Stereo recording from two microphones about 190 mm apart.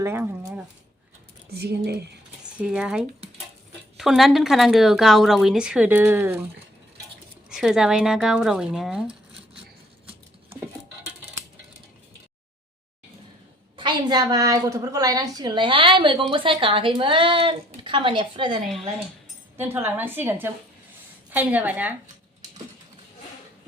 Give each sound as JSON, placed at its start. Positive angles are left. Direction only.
{"t": 0.0, "sound": "speech", "side_deg": -15}
{"t": 1.5, "sound": "speech", "side_deg": -55}
{"t": 2.6, "sound": "a woman's voice", "side_deg": -5}
{"t": 7.5, "sound": "a woman's voice", "side_deg": 0}
{"t": 13.7, "sound": "a woman's voice", "side_deg": -25}
{"t": 19.5, "sound": "a woman's voice", "side_deg": -10}